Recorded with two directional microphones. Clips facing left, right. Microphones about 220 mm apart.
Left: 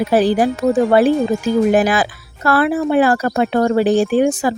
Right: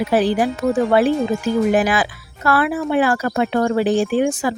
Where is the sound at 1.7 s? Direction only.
40° left (ahead or behind).